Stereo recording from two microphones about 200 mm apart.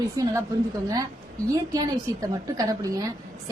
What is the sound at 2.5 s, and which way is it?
Speech, 15° right (ahead or behind).